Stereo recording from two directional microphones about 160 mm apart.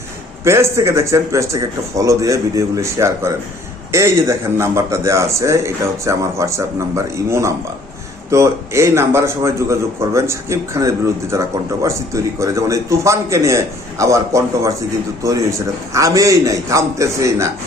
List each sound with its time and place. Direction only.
0.4 s a man's voice: 15° right (ahead or behind)